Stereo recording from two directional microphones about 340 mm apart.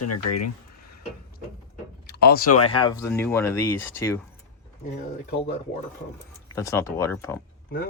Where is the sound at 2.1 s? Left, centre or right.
Left.